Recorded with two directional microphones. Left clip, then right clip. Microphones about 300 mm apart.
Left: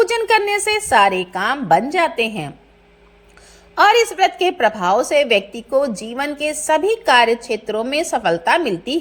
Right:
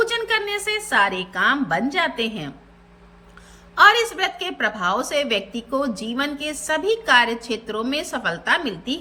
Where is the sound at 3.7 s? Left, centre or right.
Centre.